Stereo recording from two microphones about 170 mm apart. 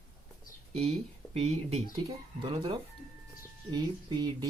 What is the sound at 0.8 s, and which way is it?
Speech, 40° right (ahead or behind).